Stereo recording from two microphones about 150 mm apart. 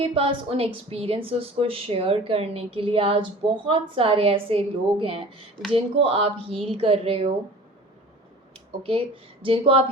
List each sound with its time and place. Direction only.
0.0 s a woman's voice: 35° right (ahead or behind)
8.8 s a woman's voice: 40° right (ahead or behind)